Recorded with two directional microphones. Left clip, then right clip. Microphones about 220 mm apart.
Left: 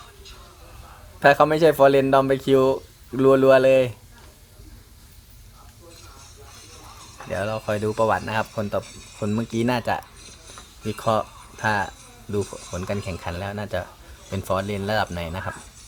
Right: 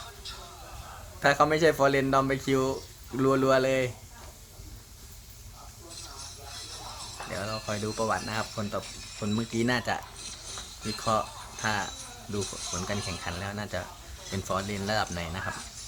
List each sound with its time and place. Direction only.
1.2 s speech: 15° left (ahead or behind)
6.5 s music: 20° right (ahead or behind)
7.3 s speech: 20° left (ahead or behind)
8.8 s speech: 20° right (ahead or behind)
9.2 s speech: 15° left (ahead or behind)
10.2 s a sound: 25° right (ahead or behind)
10.9 s speech: 15° left (ahead or behind)
12.5 s speech: 25° right (ahead or behind)
13.2 s speech: 20° left (ahead or behind)